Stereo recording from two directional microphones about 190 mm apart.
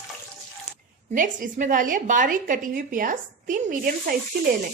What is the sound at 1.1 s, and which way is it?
A woman's voice, 45° right (ahead or behind).